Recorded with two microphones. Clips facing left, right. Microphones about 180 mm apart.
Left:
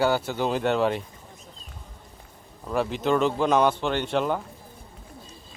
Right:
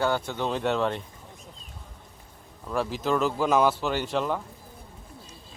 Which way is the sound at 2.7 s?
Centre (ahead or behind).